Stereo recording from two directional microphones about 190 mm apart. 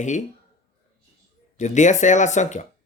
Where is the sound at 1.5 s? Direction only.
40° left (ahead or behind).